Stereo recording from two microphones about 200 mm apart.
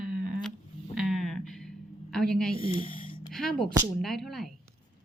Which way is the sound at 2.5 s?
25° left (ahead or behind).